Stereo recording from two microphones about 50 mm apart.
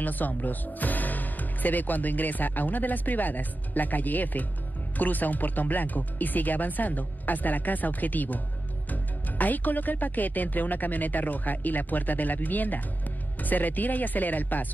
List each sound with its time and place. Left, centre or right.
0.0 s speech: left